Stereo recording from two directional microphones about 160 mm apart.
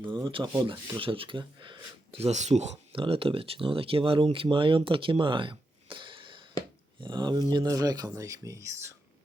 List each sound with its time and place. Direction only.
0.0 s speech: 30° right (ahead or behind)